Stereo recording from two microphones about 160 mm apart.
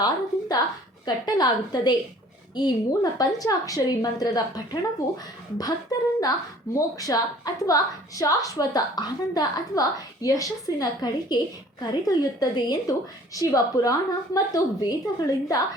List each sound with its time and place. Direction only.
0.0 s a woman's voice: 25° left (ahead or behind)